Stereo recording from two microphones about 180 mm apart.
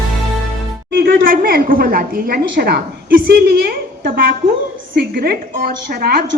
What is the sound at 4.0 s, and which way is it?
A woman's voice, 55° right (ahead or behind).